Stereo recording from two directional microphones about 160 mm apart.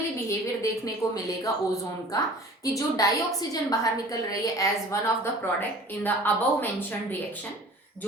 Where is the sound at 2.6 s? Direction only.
20° left (ahead or behind).